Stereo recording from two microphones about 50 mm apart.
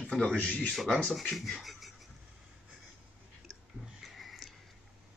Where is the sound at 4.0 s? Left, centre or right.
Centre.